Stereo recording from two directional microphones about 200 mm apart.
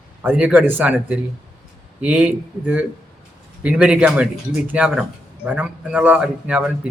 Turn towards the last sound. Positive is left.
turn(degrees=-5)  # may be behind; listen again after turning